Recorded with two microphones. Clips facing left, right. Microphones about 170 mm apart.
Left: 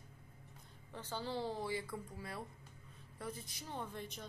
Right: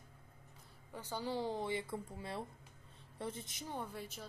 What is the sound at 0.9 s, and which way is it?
A woman's voice, 10° right (ahead or behind).